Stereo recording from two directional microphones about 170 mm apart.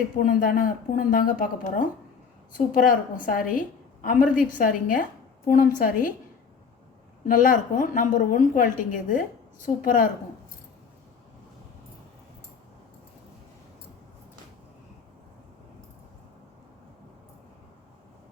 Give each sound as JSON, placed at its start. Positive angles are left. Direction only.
{"t": 0.3, "sound": "speech", "side_deg": 55}
{"t": 2.7, "sound": "a woman's voice", "side_deg": 55}
{"t": 7.3, "sound": "a woman's voice", "side_deg": 50}